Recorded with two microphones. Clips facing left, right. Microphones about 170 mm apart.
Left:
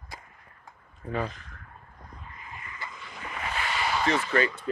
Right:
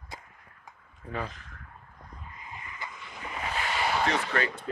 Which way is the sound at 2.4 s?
15° right (ahead or behind).